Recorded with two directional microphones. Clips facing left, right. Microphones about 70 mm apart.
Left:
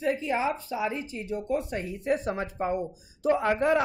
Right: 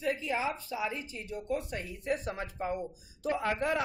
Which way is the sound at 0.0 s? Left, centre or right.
Left.